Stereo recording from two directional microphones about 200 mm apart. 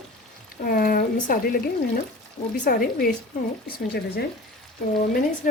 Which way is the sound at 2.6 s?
45° left (ahead or behind).